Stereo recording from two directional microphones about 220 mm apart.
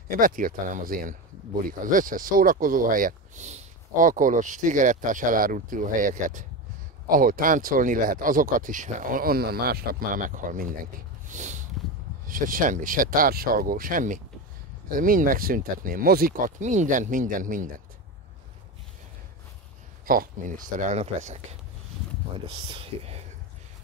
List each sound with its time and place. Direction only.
0.1 s speech: 40° right (ahead or behind)
11.2 s a sound: 35° right (ahead or behind)
12.3 s speech: 40° right (ahead or behind)
20.1 s speech: 40° right (ahead or behind)
22.7 s speech: 25° right (ahead or behind)